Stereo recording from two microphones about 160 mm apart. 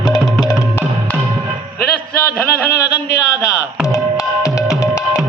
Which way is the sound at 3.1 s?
20° left (ahead or behind).